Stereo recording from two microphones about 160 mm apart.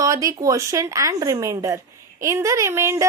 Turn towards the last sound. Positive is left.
turn(degrees=-15)  # may be behind; listen again after turning